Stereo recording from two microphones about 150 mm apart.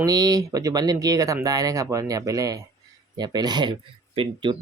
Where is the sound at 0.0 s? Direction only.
25° right (ahead or behind).